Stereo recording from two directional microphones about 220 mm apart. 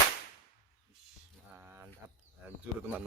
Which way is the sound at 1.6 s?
10° right (ahead or behind).